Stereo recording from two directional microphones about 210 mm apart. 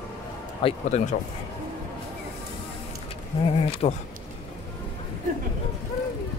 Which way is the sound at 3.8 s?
30° left (ahead or behind).